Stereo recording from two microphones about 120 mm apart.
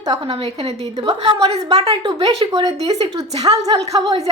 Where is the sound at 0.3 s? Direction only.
50° right (ahead or behind).